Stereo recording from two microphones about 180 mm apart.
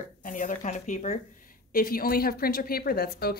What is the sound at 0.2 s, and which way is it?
Speech, 45° left (ahead or behind).